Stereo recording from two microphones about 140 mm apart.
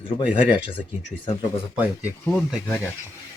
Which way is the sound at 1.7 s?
10° right (ahead or behind).